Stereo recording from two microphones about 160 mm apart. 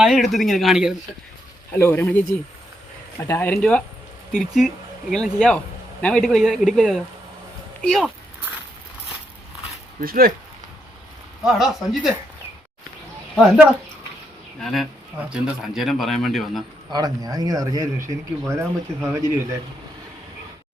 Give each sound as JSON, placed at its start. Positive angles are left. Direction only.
{"t": 0.0, "sound": "speech", "side_deg": -5}
{"t": 1.7, "sound": "speech", "side_deg": 15}
{"t": 10.0, "sound": "speech", "side_deg": -65}
{"t": 11.4, "sound": "speech", "side_deg": -5}
{"t": 14.6, "sound": "speech", "side_deg": 0}
{"t": 16.9, "sound": "speech", "side_deg": -25}